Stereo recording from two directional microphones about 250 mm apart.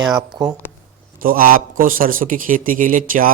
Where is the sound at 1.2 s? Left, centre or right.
Right.